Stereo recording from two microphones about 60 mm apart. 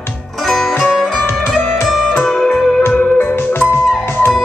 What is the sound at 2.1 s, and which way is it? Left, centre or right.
Music, centre.